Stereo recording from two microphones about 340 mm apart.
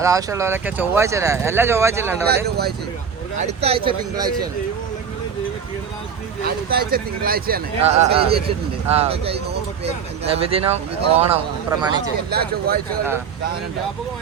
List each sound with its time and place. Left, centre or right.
0.0 s speech: centre
2.2 s speech: right
3.4 s speech: centre
6.7 s speech: right
12.3 s speech: right